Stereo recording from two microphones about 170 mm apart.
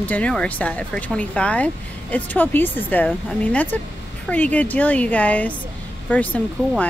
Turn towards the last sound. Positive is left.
turn(degrees=10)  # may be behind; listen again after turning